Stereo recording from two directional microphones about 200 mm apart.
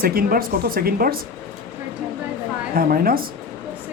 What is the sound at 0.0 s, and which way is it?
Speech, 50° right (ahead or behind).